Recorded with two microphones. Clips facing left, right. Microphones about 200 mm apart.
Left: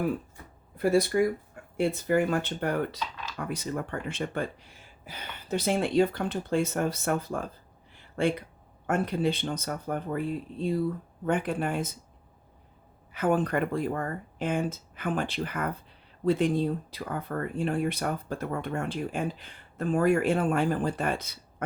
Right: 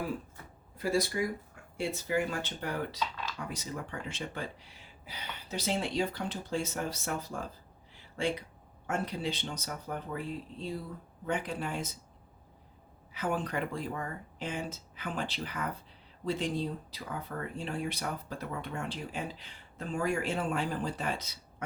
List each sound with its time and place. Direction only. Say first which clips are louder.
0.8 s speech: left 7 dB; 55° left (ahead or behind)
7.9 s a sound: left 6 dB; 55° left (ahead or behind)
8.9 s speech: left 7 dB; 55° left (ahead or behind)
11.3 s speech: left 6 dB; 55° left (ahead or behind)
13.1 s speech: left 7 dB; 55° left (ahead or behind)